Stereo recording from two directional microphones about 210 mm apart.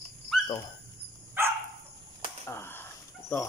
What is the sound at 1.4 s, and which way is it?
Dog, 10° right (ahead or behind).